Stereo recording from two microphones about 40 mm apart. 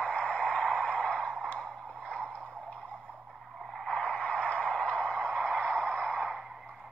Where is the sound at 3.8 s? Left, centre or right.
Left.